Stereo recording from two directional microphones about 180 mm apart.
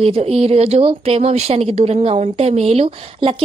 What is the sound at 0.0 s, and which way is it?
Speech, 30° right (ahead or behind).